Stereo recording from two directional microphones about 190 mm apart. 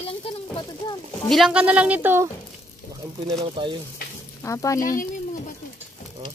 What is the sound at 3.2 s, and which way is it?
Speech, 25° right (ahead or behind).